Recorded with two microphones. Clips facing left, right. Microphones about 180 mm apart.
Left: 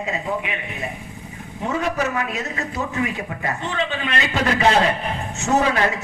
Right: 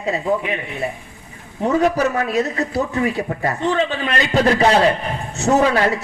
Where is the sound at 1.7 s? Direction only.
35° right (ahead or behind).